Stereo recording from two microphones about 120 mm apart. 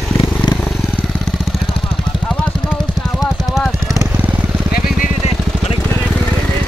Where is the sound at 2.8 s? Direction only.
5° left (ahead or behind).